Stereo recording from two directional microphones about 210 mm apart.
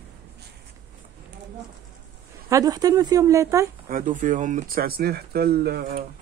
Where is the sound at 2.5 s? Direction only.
20° right (ahead or behind).